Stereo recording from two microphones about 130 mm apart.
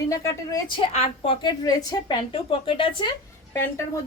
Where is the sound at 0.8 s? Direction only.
45° left (ahead or behind); by 2.1 s 30° left (ahead or behind).